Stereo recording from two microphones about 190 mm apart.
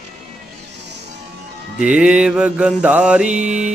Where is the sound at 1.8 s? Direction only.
5° right (ahead or behind).